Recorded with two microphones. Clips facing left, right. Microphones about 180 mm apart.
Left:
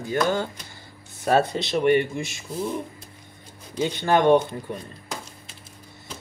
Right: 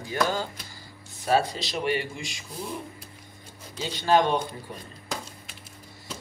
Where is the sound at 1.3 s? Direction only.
55° left (ahead or behind).